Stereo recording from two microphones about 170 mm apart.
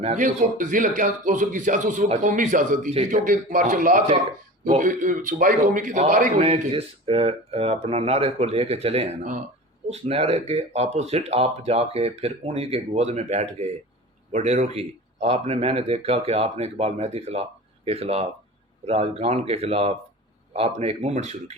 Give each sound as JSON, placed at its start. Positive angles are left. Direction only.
{"t": 0.0, "sound": "a man's voice", "side_deg": -45}
{"t": 6.4, "sound": "speech", "side_deg": -35}